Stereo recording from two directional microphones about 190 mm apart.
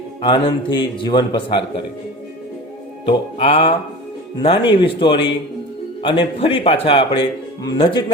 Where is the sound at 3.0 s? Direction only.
30° left (ahead or behind).